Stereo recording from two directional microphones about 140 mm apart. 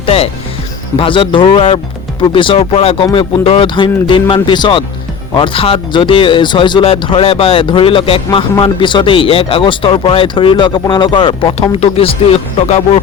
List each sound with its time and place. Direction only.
0.0 s music: 45° left (ahead or behind)
0.9 s speech: 40° left (ahead or behind)